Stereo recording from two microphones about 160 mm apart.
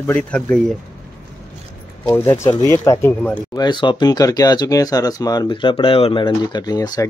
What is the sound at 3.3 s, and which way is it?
Speech, 25° left (ahead or behind).